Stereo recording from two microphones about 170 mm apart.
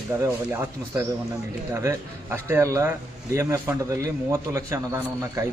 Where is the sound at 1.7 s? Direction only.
15° right (ahead or behind).